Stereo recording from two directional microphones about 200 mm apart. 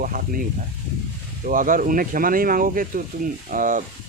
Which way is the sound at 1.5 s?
40° right (ahead or behind).